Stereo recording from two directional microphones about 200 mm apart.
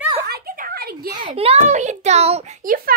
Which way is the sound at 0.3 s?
45° right (ahead or behind).